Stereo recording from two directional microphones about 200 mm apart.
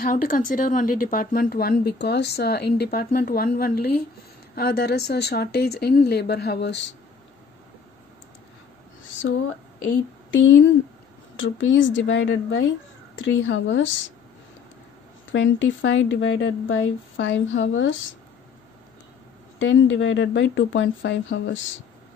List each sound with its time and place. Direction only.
0.0 s a woman's voice: 40° left (ahead or behind); by 6.9 s 60° left (ahead or behind)
9.2 s speech: 65° left (ahead or behind)
11.3 s speech: 75° left (ahead or behind)
15.3 s speech: 65° left (ahead or behind)
19.6 s speech: 75° left (ahead or behind)